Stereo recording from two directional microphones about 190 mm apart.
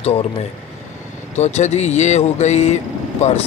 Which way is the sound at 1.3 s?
35° left (ahead or behind).